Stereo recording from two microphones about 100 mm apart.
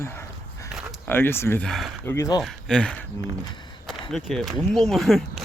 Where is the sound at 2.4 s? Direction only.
5° left (ahead or behind).